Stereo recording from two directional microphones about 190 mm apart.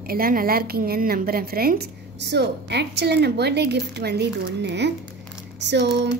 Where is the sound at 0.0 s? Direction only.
50° right (ahead or behind).